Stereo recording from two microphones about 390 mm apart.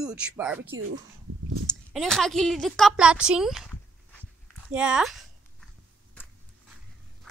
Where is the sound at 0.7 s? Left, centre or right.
Right.